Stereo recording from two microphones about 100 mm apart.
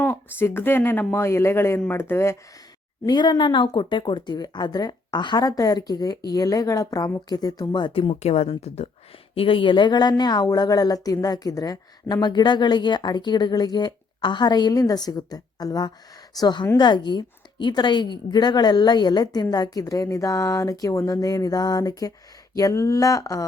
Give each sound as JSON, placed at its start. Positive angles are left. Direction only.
{"t": 0.0, "sound": "speech", "side_deg": 20}
{"t": 3.1, "sound": "speech", "side_deg": 50}
{"t": 7.9, "sound": "speech", "side_deg": 80}
{"t": 9.3, "sound": "a woman's voice", "side_deg": 65}